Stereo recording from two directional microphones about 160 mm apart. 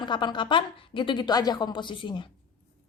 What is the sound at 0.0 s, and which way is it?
A woman's voice, 30° left (ahead or behind).